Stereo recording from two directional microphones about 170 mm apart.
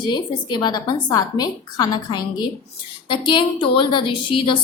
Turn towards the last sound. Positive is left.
turn(degrees=30)  # may be behind; listen again after turning